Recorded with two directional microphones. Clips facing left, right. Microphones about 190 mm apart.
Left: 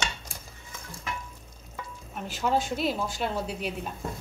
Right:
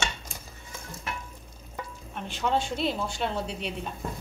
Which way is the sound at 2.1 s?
5° left (ahead or behind).